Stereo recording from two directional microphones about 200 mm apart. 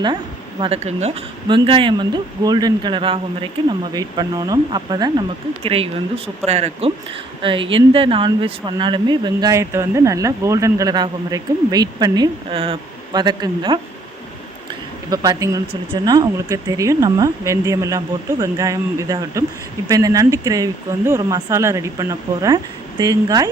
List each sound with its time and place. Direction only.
0.6 s speech: 30° right (ahead or behind)
15.1 s speech: 20° right (ahead or behind)